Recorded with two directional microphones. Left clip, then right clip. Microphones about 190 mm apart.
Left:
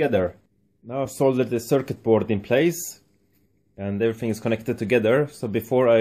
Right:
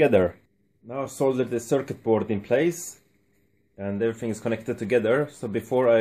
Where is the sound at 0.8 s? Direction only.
30° left (ahead or behind).